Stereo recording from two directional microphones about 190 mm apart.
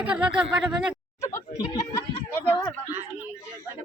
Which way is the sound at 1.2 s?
15° left (ahead or behind).